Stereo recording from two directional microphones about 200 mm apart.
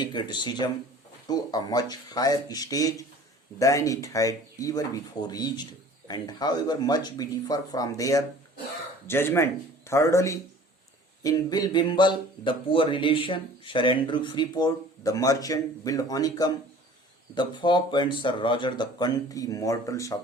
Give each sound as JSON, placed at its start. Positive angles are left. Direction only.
{"t": 0.0, "sound": "speech", "side_deg": 20}